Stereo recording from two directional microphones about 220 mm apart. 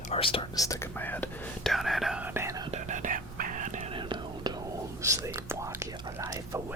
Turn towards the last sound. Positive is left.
turn(degrees=-15)  # may be behind; listen again after turning